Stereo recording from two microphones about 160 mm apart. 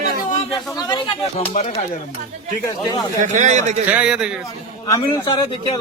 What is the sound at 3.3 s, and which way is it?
Speech, 50° right (ahead or behind).